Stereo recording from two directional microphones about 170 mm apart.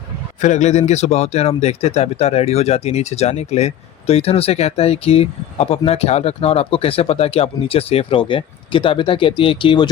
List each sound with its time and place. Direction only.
0.4 s speech: 45° left (ahead or behind); by 9.9 s 30° left (ahead or behind)